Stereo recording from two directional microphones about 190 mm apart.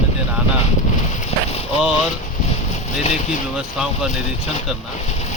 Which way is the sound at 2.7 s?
35° left (ahead or behind).